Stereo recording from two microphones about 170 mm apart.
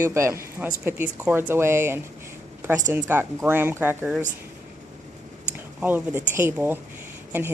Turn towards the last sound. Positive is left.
turn(degrees=-15)  # may be behind; listen again after turning